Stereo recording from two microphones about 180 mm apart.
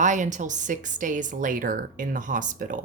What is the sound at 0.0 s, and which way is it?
A woman's voice, 45° right (ahead or behind).